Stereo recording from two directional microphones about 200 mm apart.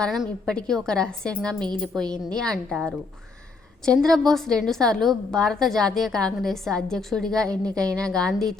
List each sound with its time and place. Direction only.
0.0 s a woman's voice: centre (ahead or behind)
3.8 s a woman's voice: centre (ahead or behind)